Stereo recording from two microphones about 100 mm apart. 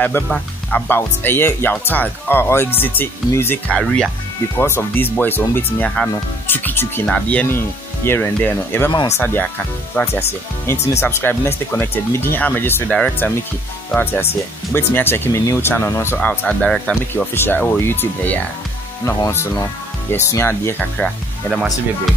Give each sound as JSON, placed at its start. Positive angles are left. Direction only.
{"t": 0.3, "sound": "speech", "side_deg": 15}
{"t": 3.8, "sound": "speech", "side_deg": 5}
{"t": 4.6, "sound": "speech", "side_deg": 25}
{"t": 13.9, "sound": "speech", "side_deg": 20}
{"t": 17.3, "sound": "speech", "side_deg": 20}
{"t": 21.5, "sound": "speech", "side_deg": -5}